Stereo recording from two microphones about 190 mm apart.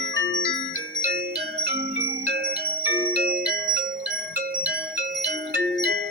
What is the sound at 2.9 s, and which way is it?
Music, 55° right (ahead or behind).